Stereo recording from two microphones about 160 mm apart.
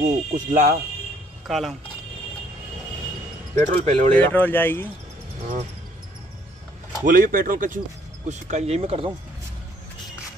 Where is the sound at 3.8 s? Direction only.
45° right (ahead or behind).